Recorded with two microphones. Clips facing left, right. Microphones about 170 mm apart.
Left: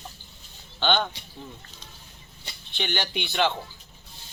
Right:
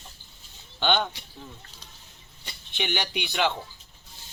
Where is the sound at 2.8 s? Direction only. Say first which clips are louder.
Even; 10° right (ahead or behind).